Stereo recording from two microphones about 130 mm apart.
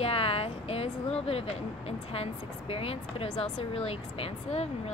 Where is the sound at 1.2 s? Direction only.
50° left (ahead or behind).